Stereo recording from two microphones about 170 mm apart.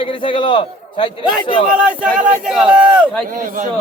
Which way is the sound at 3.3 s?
50° right (ahead or behind).